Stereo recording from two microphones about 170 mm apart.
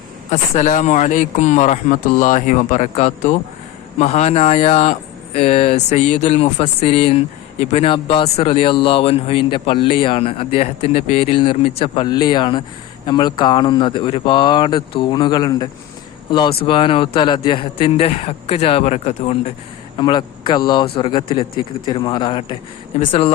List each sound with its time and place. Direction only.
0.3 s speech: 45° left (ahead or behind)
20.0 s speech: 25° left (ahead or behind)
23.0 s speech: 45° left (ahead or behind)